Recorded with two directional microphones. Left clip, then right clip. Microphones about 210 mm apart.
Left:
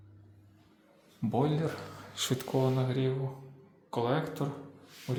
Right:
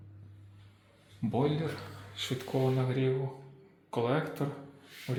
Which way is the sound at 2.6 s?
Centre (ahead or behind).